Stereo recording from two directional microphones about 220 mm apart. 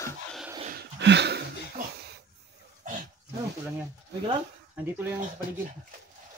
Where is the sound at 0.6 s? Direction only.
40° right (ahead or behind).